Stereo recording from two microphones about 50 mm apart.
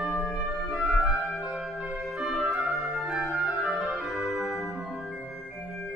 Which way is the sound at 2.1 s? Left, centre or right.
Centre.